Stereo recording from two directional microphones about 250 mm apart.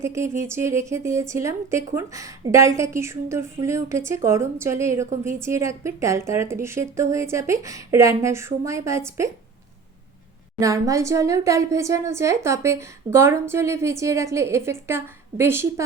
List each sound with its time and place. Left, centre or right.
0.0 s a woman's voice: centre
10.6 s a woman's voice: centre